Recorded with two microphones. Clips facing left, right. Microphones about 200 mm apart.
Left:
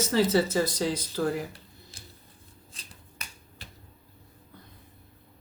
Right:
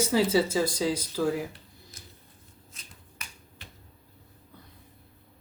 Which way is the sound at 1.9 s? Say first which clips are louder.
Even; 30° left (ahead or behind).